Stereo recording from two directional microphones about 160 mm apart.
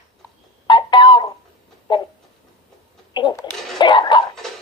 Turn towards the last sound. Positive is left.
turn(degrees=30)  # may be behind; listen again after turning